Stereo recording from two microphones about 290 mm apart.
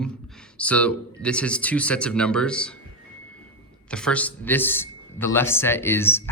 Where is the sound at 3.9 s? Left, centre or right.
Centre.